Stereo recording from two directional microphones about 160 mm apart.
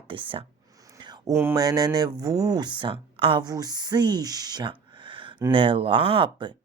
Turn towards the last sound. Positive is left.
turn(degrees=-30)  # may be behind; listen again after turning